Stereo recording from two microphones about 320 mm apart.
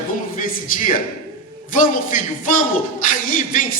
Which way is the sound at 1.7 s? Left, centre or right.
Left.